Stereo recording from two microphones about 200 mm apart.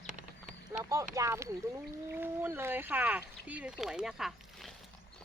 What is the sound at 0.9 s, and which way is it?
Speech, 15° right (ahead or behind).